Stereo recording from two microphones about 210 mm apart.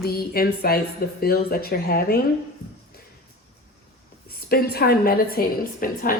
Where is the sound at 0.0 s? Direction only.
45° left (ahead or behind).